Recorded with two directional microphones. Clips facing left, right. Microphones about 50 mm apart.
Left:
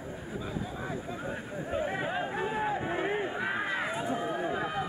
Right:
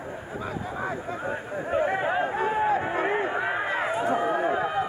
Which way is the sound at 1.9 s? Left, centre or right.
Right.